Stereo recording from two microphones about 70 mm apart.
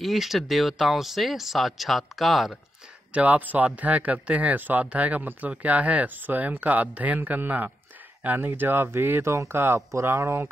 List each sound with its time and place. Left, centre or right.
0.0 s speech: centre
3.1 s speech: centre; by 10.4 s right